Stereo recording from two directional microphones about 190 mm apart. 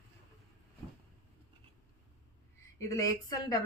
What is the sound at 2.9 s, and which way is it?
Speech, 20° left (ahead or behind).